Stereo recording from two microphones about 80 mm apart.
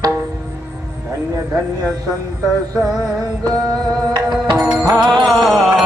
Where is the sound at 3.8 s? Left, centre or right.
Centre.